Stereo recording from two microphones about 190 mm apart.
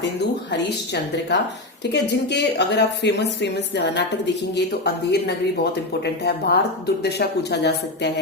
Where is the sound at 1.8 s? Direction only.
65° left (ahead or behind).